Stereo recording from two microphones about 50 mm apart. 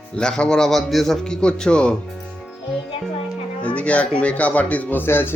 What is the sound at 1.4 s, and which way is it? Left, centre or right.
Speech, centre.